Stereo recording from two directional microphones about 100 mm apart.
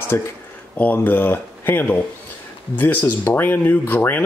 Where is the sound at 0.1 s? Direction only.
25° left (ahead or behind).